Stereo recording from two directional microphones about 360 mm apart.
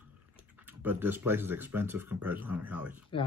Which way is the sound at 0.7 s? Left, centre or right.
Centre.